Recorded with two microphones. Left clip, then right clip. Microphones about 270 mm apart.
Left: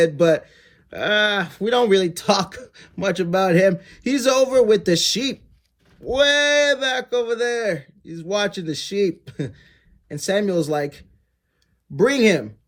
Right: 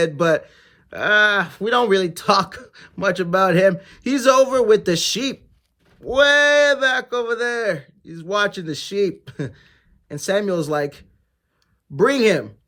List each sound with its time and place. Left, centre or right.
0.0 s speech: centre